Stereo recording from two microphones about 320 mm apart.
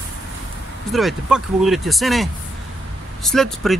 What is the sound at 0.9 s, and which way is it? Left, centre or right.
Speech, centre.